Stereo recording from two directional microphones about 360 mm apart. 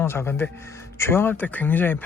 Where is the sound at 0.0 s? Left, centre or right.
Centre.